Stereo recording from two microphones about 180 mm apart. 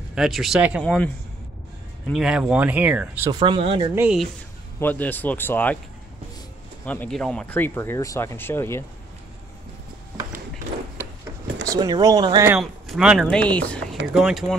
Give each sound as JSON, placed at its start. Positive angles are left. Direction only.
{"t": 0.1, "sound": "speech", "side_deg": 0}
{"t": 0.8, "sound": "speech", "side_deg": 5}
{"t": 3.3, "sound": "speech", "side_deg": -30}
{"t": 3.9, "sound": "speech", "side_deg": -10}
{"t": 4.7, "sound": "speech", "side_deg": 10}
{"t": 6.9, "sound": "speech", "side_deg": 5}
{"t": 11.6, "sound": "speech", "side_deg": -20}
{"t": 12.4, "sound": "speech", "side_deg": 0}
{"t": 14.1, "sound": "speech", "side_deg": -5}